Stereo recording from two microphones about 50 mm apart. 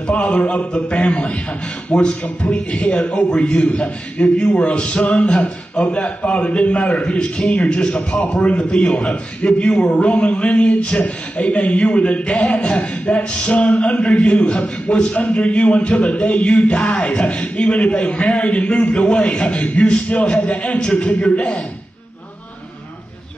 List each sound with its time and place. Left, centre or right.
0.0 s a man's voice: left